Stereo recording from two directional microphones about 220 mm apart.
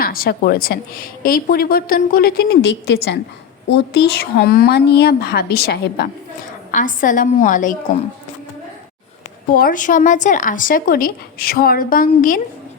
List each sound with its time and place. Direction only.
0.0 s a woman's voice: 40° left (ahead or behind)
6.7 s speech: 35° left (ahead or behind)
9.6 s speech: 40° left (ahead or behind)